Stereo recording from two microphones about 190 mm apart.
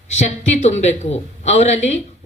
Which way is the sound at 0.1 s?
40° left (ahead or behind).